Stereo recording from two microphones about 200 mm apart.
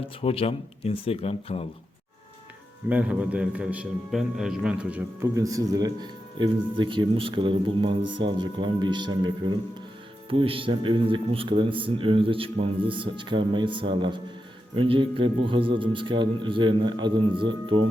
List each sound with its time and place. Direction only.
0.2 s speech: 30° left (ahead or behind)
2.9 s a man's voice: 5° right (ahead or behind); by 17.7 s 25° right (ahead or behind)